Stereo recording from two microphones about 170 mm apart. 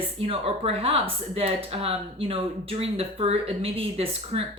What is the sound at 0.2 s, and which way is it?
Speech, 35° right (ahead or behind).